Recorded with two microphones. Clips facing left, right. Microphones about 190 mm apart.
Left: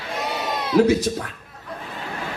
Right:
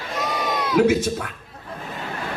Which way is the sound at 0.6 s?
35° left (ahead or behind).